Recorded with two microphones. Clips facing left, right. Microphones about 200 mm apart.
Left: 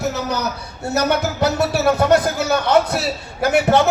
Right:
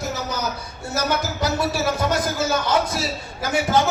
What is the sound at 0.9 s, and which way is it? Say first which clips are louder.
A man's voice: left 5 dB; 65° left (ahead or behind).